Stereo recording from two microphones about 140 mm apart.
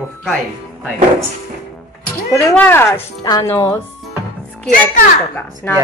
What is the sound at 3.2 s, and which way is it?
Speech, 25° left (ahead or behind).